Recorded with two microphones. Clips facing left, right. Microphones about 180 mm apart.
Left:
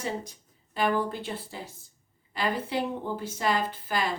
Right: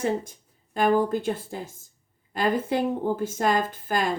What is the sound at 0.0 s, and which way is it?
A woman's voice, 50° right (ahead or behind).